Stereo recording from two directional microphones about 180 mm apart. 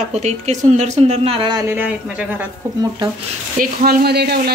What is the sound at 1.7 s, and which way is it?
Speech, 10° right (ahead or behind).